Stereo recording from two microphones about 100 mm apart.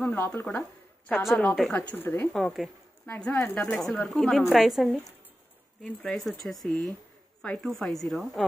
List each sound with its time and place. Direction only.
0.0 s speech: 20° left (ahead or behind)
2.3 s speech: centre (ahead or behind)
3.1 s speech: 10° left (ahead or behind)
3.3 s speech: 25° left (ahead or behind)
3.8 s speech: 5° left (ahead or behind)